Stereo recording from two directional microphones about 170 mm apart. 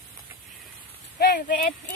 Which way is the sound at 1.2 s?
75° left (ahead or behind).